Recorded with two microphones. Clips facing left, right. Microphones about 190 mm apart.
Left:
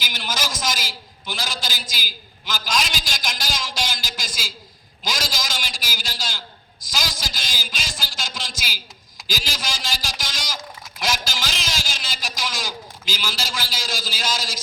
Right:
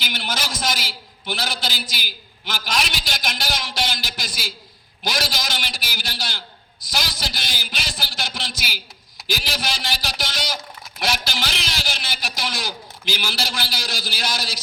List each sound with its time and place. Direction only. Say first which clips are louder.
0.0 s a man's voice: right 1 dB; 60° right (ahead or behind)